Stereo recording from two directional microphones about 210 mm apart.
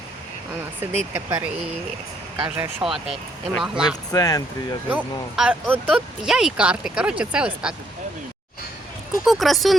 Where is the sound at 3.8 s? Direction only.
15° left (ahead or behind).